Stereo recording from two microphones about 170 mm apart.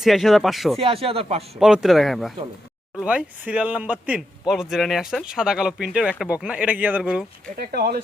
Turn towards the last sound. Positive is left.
turn(degrees=-65)  # may be behind; listen again after turning